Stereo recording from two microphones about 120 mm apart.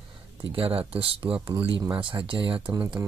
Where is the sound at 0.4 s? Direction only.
50° right (ahead or behind).